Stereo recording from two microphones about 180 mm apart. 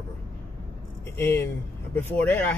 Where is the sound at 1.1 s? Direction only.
10° left (ahead or behind).